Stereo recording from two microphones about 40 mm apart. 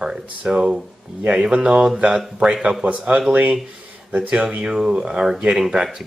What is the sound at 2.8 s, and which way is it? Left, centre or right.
Speech, right.